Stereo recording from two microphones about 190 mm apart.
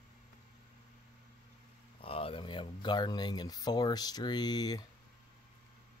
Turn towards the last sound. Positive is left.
turn(degrees=20)  # may be behind; listen again after turning